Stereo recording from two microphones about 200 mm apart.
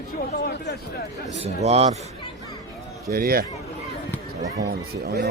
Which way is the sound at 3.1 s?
50° right (ahead or behind).